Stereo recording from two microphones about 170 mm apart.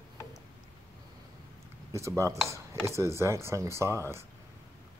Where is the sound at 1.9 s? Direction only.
15° right (ahead or behind).